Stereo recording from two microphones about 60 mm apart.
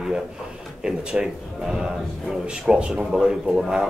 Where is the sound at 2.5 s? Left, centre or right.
Centre.